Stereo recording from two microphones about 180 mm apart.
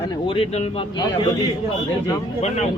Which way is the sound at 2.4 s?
40° left (ahead or behind).